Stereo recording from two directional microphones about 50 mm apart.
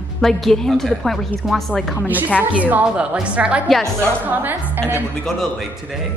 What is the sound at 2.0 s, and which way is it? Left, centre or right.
A woman's voice, right.